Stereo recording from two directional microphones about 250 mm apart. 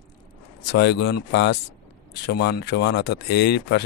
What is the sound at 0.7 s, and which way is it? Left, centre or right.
Speech, left.